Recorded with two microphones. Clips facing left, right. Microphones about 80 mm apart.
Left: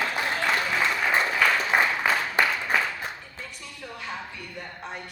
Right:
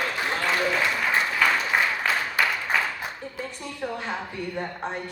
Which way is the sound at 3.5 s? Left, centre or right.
Right.